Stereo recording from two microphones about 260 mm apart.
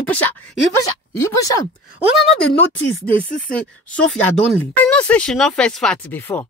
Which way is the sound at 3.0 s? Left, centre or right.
Left.